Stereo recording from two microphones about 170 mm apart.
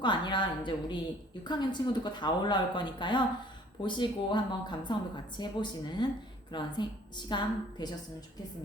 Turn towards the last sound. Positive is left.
turn(degrees=25)  # may be behind; listen again after turning